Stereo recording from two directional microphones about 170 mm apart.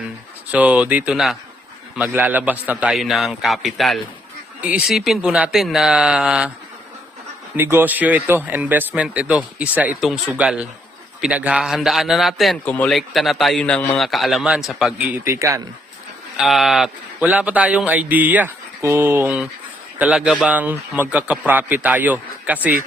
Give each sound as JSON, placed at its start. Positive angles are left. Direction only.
{"t": 0.5, "sound": "a man's voice", "side_deg": -10}
{"t": 7.5, "sound": "a man's voice", "side_deg": -15}
{"t": 15.2, "sound": "a man's voice", "side_deg": -15}
{"t": 16.4, "sound": "a man's voice", "side_deg": 0}